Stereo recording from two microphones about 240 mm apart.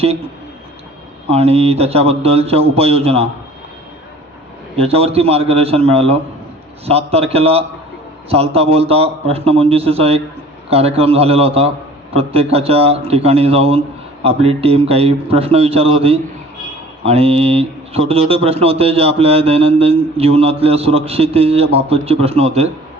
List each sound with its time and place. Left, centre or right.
1.3 s speech: right
4.8 s speech: right